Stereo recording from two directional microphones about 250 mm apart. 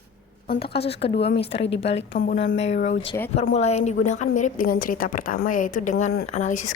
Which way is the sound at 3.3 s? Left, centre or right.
Left.